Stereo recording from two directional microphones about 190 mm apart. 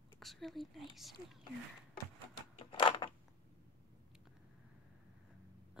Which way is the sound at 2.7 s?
25° left (ahead or behind).